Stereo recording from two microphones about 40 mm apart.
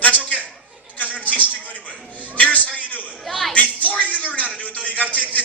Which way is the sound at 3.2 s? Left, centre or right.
Centre.